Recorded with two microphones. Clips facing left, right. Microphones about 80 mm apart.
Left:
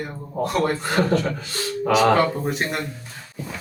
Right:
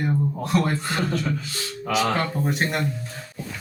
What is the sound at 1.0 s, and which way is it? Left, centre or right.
Speech, left.